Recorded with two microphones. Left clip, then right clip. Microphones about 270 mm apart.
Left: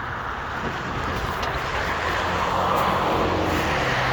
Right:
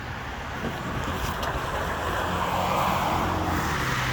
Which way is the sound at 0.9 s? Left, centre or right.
Right.